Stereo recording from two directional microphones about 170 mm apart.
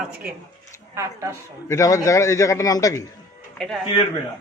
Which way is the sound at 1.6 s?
20° left (ahead or behind).